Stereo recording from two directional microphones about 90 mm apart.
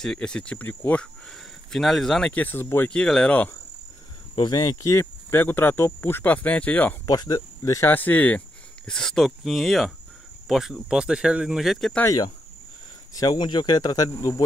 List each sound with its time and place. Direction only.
0.0 s speech: 10° left (ahead or behind)
1.2 s speech: 5° left (ahead or behind)
2.3 s speech: 20° left (ahead or behind)
2.9 s speech: 10° left (ahead or behind)
4.4 s speech: 45° left (ahead or behind)
5.3 s speech: 25° left (ahead or behind)
7.1 s speech: 45° left (ahead or behind)
7.9 s speech: 20° left (ahead or behind)
8.8 s speech: 5° left (ahead or behind)
13.1 s speech: 50° left (ahead or behind)
14.1 s speech: 35° left (ahead or behind)